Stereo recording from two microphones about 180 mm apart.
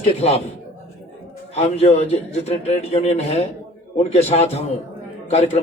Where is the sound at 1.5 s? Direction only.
35° left (ahead or behind).